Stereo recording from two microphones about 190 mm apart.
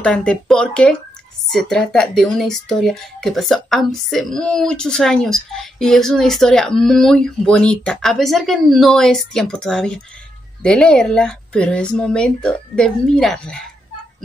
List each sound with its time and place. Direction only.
0.0 s speech: 5° left (ahead or behind)